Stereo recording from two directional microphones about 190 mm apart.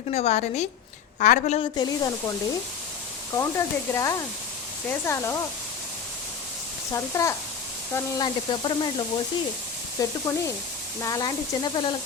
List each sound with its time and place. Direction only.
0.1 s a woman's voice: 35° left (ahead or behind)
1.7 s speech: 20° left (ahead or behind)
3.3 s speech: 15° left (ahead or behind)
6.9 s speech: 15° left (ahead or behind)